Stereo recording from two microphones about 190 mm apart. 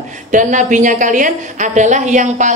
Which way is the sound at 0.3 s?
40° right (ahead or behind).